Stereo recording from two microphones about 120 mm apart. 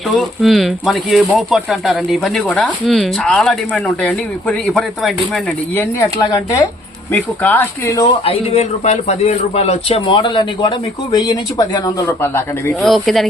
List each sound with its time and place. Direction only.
0.1 s speech: centre (ahead or behind)
6.1 s speech: 30° left (ahead or behind)
7.1 s speech: 15° left (ahead or behind)
8.2 s a man's voice: 55° left (ahead or behind)
10.1 s speech: 40° left (ahead or behind); by 12.7 s 20° left (ahead or behind)
12.8 s speech: centre (ahead or behind)